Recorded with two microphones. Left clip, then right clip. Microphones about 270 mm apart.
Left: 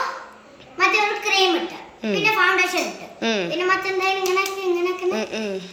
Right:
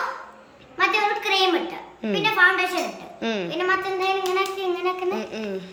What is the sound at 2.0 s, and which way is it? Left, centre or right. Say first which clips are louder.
A child's voice: even; centre.